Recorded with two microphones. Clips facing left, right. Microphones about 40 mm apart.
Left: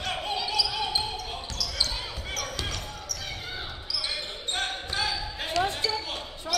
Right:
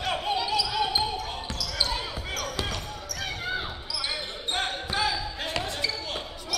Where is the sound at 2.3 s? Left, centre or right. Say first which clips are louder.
Right 2 dB; centre.